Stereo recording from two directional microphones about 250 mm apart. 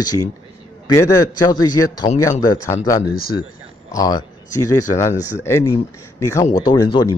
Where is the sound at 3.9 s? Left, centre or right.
Centre.